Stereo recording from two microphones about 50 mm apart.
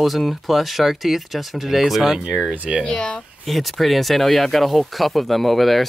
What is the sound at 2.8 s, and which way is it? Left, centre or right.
Speech, centre.